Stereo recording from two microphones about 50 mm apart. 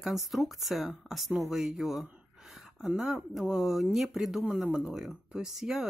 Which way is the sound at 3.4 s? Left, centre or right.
Centre.